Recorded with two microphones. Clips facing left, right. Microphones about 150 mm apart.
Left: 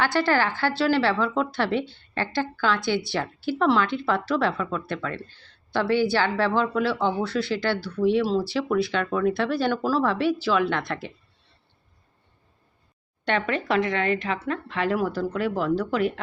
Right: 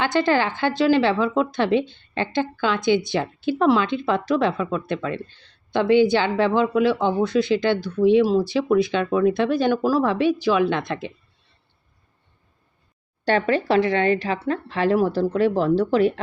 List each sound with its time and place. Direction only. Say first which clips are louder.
0.0 s speech: right 2 dB; 20° right (ahead or behind)
13.2 s speech: right 5 dB; 35° right (ahead or behind)